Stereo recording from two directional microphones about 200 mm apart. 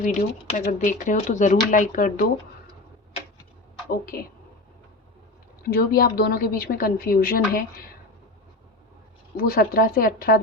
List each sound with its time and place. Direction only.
0.0 s speech: 40° left (ahead or behind)
5.6 s a woman's voice: 50° left (ahead or behind)
9.4 s a woman's voice: 50° left (ahead or behind)